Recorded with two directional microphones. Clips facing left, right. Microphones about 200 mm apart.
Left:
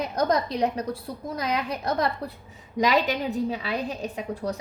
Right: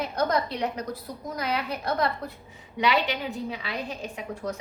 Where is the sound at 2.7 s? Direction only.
40° left (ahead or behind).